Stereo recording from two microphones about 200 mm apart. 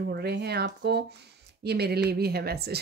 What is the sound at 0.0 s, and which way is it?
A woman's voice, 55° right (ahead or behind).